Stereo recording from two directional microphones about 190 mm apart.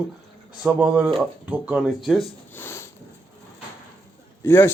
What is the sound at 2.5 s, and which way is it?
Sniff, 10° left (ahead or behind).